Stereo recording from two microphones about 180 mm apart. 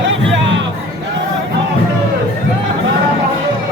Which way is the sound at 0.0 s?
90° right.